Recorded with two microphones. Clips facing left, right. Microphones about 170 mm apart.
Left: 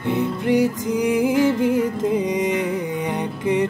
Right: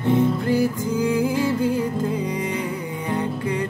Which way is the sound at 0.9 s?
15° left (ahead or behind).